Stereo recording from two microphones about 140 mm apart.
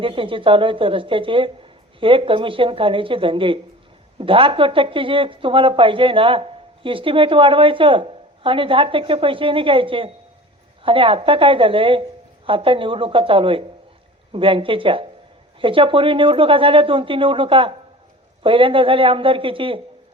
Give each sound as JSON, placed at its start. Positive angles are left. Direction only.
{"t": 0.0, "sound": "a woman's voice", "side_deg": -40}